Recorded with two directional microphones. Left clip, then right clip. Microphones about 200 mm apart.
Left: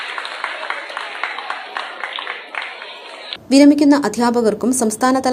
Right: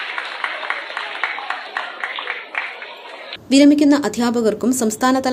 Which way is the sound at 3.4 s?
5° left (ahead or behind).